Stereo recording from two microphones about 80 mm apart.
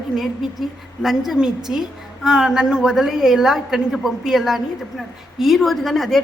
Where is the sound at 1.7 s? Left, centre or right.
Centre.